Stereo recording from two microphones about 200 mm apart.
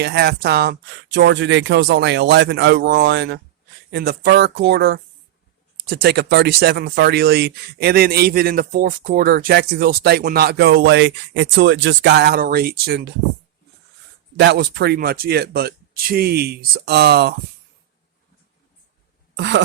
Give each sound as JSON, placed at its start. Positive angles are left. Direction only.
{"t": 0.0, "sound": "speech", "side_deg": -55}
{"t": 14.3, "sound": "speech", "side_deg": -55}
{"t": 19.4, "sound": "speech", "side_deg": -60}